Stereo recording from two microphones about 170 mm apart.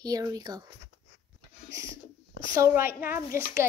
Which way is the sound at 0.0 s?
20° right (ahead or behind).